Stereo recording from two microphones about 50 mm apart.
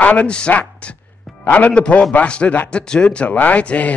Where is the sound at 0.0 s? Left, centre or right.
Left.